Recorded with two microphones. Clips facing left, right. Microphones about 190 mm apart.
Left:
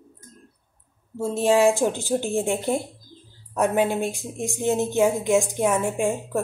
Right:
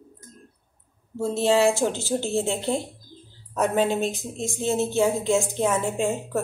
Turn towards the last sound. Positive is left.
turn(degrees=15)  # may be behind; listen again after turning